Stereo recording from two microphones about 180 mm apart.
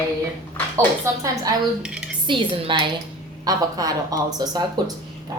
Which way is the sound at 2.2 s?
30° right (ahead or behind).